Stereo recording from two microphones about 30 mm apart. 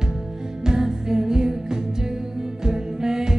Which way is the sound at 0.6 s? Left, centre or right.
Centre.